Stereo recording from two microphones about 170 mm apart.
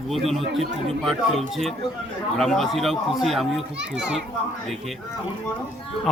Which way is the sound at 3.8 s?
90° right.